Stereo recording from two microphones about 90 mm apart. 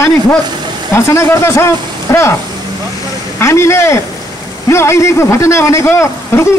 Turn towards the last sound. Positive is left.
turn(degrees=30)  # may be behind; listen again after turning